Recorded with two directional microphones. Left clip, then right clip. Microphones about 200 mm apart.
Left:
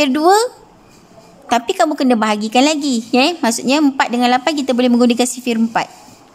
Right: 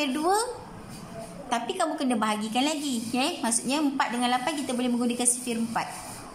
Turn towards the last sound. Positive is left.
turn(degrees=50)  # may be behind; listen again after turning